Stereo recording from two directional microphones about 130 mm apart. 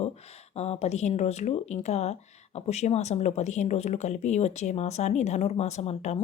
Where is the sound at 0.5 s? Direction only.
55° left (ahead or behind).